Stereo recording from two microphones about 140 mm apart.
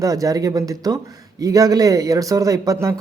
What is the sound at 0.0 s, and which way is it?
Speech, 25° right (ahead or behind).